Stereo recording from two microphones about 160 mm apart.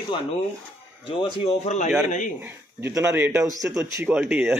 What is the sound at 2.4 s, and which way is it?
Speech, 15° right (ahead or behind).